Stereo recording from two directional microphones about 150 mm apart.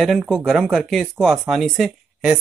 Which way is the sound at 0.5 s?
Centre (ahead or behind).